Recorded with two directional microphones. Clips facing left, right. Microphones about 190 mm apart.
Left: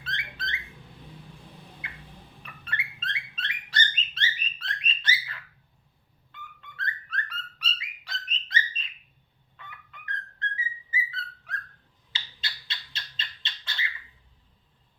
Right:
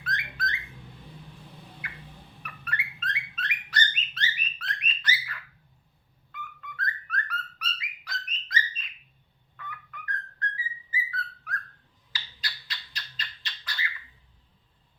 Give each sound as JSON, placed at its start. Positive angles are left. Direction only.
{"t": 0.0, "sound": "bird", "side_deg": 25}
{"t": 1.8, "sound": "a sound", "side_deg": 25}
{"t": 2.4, "sound": "bird", "side_deg": 25}
{"t": 10.9, "sound": "whistling", "side_deg": 25}
{"t": 12.1, "sound": "bird", "side_deg": 25}